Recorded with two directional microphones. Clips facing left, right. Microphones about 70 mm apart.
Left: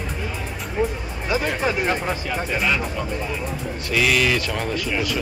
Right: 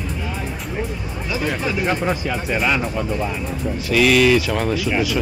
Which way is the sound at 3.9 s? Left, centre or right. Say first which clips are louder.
Right 5 dB; centre.